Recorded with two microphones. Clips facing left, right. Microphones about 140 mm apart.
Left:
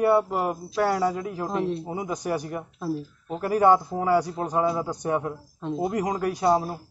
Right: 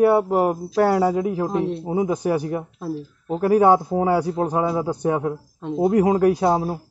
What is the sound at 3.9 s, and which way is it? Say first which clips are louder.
Speech: right 4 dB; 90° right.